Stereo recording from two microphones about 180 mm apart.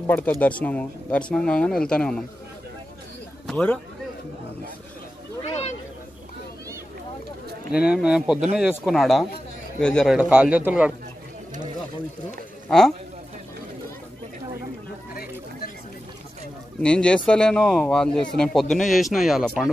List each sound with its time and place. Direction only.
0.0 s speech: 10° left (ahead or behind)
3.4 s speech: 5° left (ahead or behind)
5.4 s a sound: 35° left (ahead or behind)
7.7 s speech: 5° right (ahead or behind)
12.6 s speech: 5° left (ahead or behind)
16.8 s speech: 5° left (ahead or behind)